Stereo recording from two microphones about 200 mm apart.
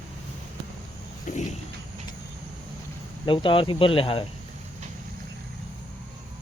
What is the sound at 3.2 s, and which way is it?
Speech, 25° left (ahead or behind).